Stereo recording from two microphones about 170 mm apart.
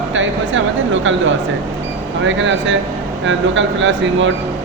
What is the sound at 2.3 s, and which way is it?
Speech, 90° right.